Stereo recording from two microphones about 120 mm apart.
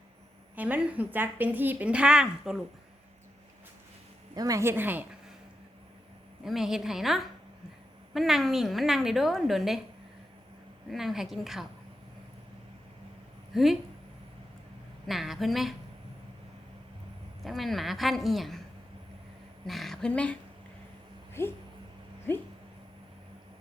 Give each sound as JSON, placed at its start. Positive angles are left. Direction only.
{"t": 0.5, "sound": "a woman's voice", "side_deg": -15}
{"t": 4.4, "sound": "speech", "side_deg": -30}
{"t": 6.4, "sound": "a woman's voice", "side_deg": -5}
{"t": 10.9, "sound": "a woman's voice", "side_deg": 0}
{"t": 13.5, "sound": "speech", "side_deg": 0}
{"t": 15.0, "sound": "a woman's voice", "side_deg": 0}
{"t": 17.4, "sound": "a woman's voice", "side_deg": 0}
{"t": 19.6, "sound": "a woman's voice", "side_deg": 0}
{"t": 21.4, "sound": "a sound", "side_deg": 20}